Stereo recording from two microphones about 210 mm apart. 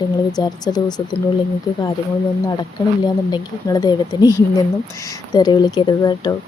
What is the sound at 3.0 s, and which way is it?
Speech, 20° left (ahead or behind).